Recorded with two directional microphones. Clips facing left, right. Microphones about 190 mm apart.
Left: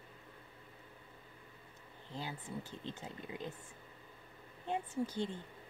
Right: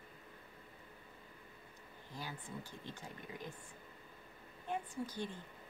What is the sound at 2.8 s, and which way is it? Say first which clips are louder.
Speech: left 4 dB; 20° left (ahead or behind).